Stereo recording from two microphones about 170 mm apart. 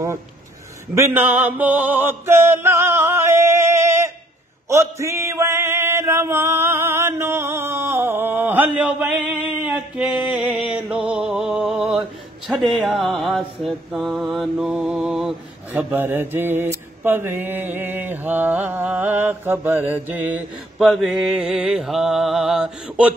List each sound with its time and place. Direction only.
0.9 s a sound: 15° right (ahead or behind)
4.6 s male singing: 15° right (ahead or behind)
12.4 s mantra: centre (ahead or behind)
15.8 s mantra: 10° right (ahead or behind)
20.8 s mantra: centre (ahead or behind)